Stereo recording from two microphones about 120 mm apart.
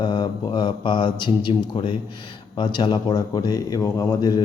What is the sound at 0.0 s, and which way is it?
A man's voice, 40° left (ahead or behind).